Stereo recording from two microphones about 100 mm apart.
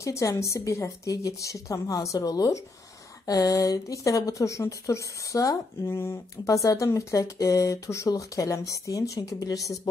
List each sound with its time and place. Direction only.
0.0 s speech: 30° left (ahead or behind)